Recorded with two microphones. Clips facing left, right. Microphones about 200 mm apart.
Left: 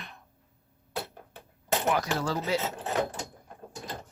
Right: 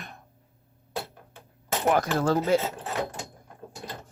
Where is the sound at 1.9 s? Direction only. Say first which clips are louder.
Right 7 dB; 50° right (ahead or behind).